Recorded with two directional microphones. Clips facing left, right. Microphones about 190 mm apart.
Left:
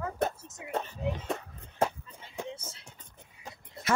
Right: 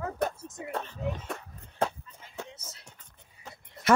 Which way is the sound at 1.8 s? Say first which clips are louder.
Left 1 dB; 10° left (ahead or behind).